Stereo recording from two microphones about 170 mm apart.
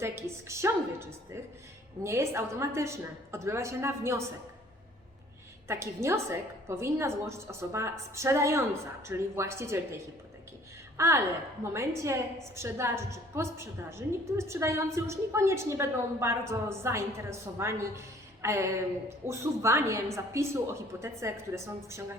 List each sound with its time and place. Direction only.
0.0 s a woman's voice: 15° right (ahead or behind)
5.6 s a woman's voice: 15° right (ahead or behind)
10.9 s a woman's voice: 15° right (ahead or behind)